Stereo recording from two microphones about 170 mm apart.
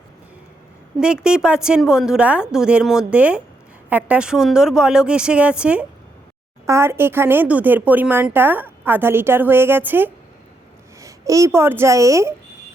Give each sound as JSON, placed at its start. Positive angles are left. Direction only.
{"t": 0.9, "sound": "a woman's voice", "side_deg": -5}